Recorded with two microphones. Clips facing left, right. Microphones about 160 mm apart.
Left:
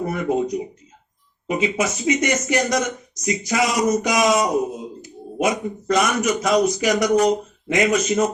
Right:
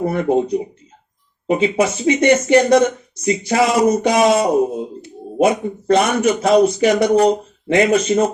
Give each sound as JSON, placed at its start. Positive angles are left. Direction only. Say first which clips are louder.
{"t": 0.0, "sound": "speech", "louder": "right 5 dB", "side_deg": -30}